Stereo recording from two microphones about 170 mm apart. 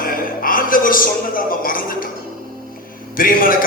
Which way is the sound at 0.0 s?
55° left (ahead or behind).